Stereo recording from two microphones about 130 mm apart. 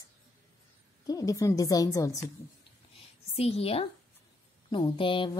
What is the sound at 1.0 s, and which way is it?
Speech, 25° left (ahead or behind).